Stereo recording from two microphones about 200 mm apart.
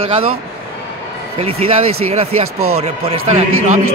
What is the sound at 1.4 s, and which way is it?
Speech, 30° right (ahead or behind).